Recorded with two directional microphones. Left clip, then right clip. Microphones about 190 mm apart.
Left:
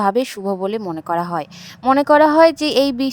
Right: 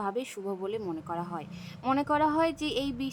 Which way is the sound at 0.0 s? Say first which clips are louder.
Left 15 dB; 50° left (ahead or behind).